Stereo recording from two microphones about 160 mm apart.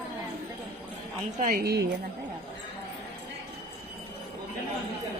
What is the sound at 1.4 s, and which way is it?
Speech, 60° right (ahead or behind).